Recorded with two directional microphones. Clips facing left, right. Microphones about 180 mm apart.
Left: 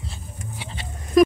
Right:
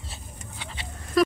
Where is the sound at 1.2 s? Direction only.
15° left (ahead or behind).